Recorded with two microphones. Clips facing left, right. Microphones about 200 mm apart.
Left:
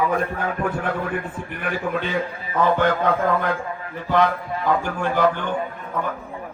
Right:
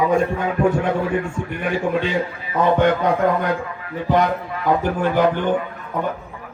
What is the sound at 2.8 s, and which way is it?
Speech, 15° right (ahead or behind).